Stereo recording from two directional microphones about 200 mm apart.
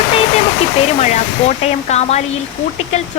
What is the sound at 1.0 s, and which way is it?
A woman's voice, 35° left (ahead or behind).